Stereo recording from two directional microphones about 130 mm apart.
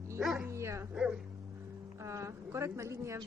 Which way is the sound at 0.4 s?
20° right (ahead or behind).